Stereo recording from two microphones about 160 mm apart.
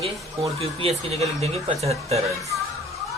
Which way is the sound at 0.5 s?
40° right (ahead or behind).